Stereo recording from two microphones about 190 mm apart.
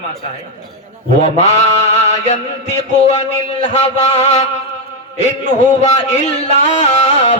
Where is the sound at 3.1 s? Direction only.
35° left (ahead or behind).